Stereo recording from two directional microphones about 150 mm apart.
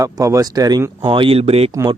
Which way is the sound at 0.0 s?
20° right (ahead or behind).